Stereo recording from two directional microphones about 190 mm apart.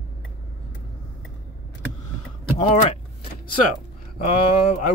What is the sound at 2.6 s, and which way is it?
Speech, 35° left (ahead or behind).